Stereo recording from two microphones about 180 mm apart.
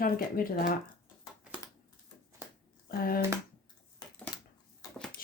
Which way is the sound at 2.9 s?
55° left (ahead or behind).